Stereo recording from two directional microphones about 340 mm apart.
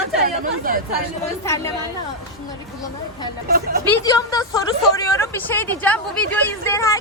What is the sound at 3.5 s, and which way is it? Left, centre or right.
Speech, right.